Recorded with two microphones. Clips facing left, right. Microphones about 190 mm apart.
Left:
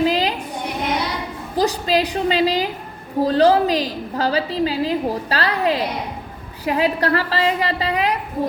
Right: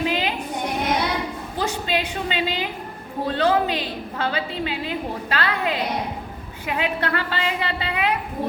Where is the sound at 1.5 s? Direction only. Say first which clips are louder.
Left 7 dB; 35° left (ahead or behind).